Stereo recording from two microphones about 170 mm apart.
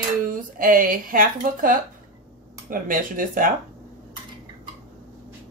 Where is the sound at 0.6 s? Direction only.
55° right (ahead or behind).